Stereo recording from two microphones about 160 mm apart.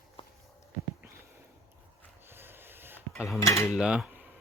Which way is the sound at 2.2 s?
15° right (ahead or behind).